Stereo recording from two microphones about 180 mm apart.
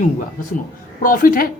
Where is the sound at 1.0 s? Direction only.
50° left (ahead or behind).